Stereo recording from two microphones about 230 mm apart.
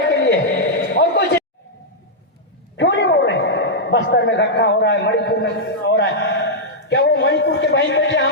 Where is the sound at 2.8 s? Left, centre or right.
Left.